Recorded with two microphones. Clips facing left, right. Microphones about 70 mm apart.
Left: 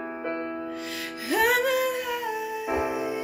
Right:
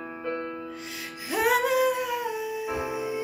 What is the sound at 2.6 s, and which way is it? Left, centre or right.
Music, left.